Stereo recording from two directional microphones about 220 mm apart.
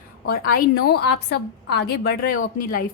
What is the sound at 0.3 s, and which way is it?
A woman's voice, 45° left (ahead or behind).